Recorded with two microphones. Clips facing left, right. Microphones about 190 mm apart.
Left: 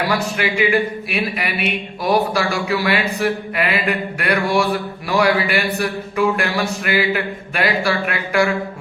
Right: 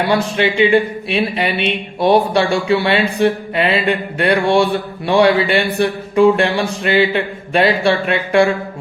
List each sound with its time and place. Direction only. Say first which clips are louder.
0.1 s speech: right 5 dB; 30° right (ahead or behind)